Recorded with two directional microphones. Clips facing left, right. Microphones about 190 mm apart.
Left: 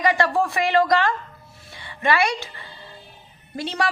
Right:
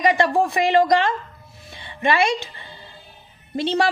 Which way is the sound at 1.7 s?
20° right (ahead or behind).